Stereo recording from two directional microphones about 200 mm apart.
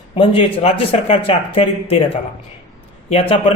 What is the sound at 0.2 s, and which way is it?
A man's voice, 25° left (ahead or behind).